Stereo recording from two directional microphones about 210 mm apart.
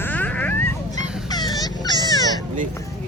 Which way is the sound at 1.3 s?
20° left (ahead or behind).